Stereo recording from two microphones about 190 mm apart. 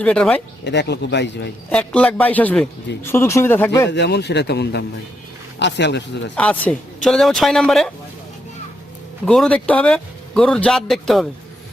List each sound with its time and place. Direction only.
0.0 s a man's voice: 5° left (ahead or behind)
0.6 s speech: 65° left (ahead or behind)
1.7 s a man's voice: 5° left (ahead or behind)
3.8 s speech: 65° left (ahead or behind)
6.3 s a man's voice: 10° left (ahead or behind)
9.2 s a man's voice: 5° left (ahead or behind)